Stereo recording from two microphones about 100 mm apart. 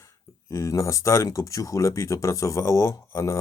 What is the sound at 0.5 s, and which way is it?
Speech, 30° left (ahead or behind).